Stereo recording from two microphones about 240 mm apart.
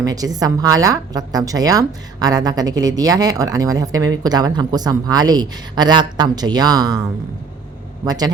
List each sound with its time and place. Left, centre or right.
0.0 s a woman's voice: centre
8.0 s a woman's voice: centre